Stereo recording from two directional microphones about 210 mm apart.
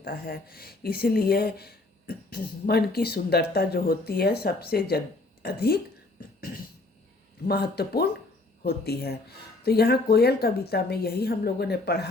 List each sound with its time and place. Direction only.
0.0 s speech: 45° left (ahead or behind)